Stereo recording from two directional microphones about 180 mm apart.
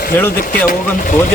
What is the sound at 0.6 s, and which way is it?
Speech, 50° left (ahead or behind).